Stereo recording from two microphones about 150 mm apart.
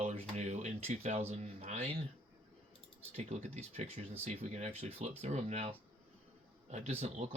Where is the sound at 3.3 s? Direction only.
50° right (ahead or behind).